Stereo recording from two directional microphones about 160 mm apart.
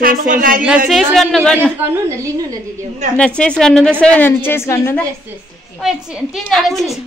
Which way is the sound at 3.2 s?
5° left (ahead or behind).